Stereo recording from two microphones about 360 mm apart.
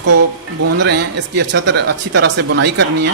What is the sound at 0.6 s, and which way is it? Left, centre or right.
Speech, right.